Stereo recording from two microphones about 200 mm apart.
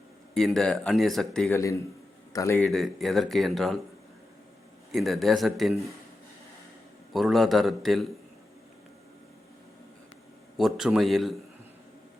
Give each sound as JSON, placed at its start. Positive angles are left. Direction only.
{"t": 0.3, "sound": "speech", "side_deg": 0}
{"t": 1.5, "sound": "a man's voice", "side_deg": 15}
{"t": 2.6, "sound": "speech", "side_deg": 0}
{"t": 4.9, "sound": "speech", "side_deg": 0}
{"t": 7.1, "sound": "speech", "side_deg": 0}
{"t": 10.6, "sound": "speech", "side_deg": 0}